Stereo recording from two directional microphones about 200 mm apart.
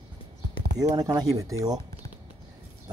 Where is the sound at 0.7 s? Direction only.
20° right (ahead or behind).